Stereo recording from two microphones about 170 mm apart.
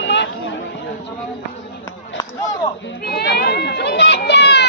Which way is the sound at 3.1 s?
70° left (ahead or behind).